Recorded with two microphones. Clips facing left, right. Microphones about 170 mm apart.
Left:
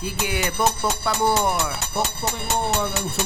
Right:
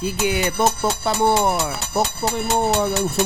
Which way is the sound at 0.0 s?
20° right (ahead or behind).